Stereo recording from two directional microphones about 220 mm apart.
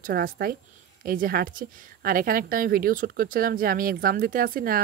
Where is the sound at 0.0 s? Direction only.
40° right (ahead or behind).